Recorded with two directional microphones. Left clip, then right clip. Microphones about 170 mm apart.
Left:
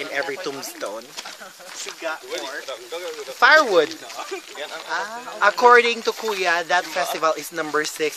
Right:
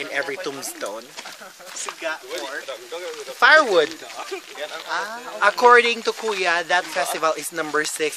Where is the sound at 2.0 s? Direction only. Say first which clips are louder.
Even; 40° right (ahead or behind).